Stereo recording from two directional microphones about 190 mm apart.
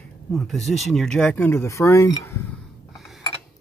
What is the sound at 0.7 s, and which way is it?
Speech, centre (ahead or behind).